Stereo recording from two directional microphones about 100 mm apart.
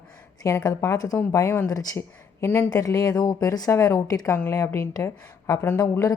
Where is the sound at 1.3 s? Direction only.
30° left (ahead or behind).